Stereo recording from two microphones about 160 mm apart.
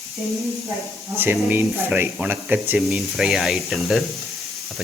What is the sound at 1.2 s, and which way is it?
Speech, 10° right (ahead or behind).